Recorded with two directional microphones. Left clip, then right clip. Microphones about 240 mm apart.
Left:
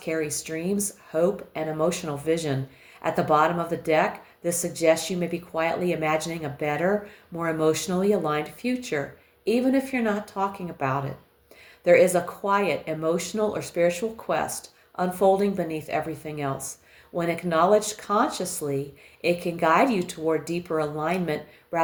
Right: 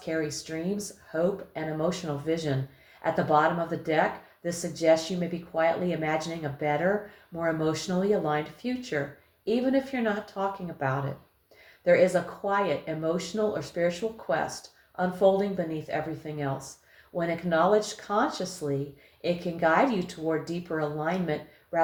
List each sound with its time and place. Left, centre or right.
0.0 s speech: left